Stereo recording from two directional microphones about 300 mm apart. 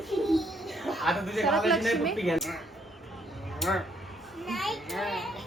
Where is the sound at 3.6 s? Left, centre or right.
Centre.